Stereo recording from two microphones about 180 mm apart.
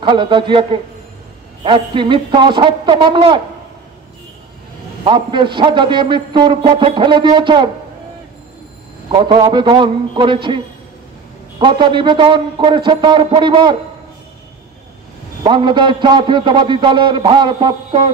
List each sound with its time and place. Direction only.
0.0 s a man's voice: 25° right (ahead or behind)
5.0 s a man's voice: 25° right (ahead or behind)
9.1 s a man's voice: 25° right (ahead or behind)
15.4 s a man's voice: 25° right (ahead or behind)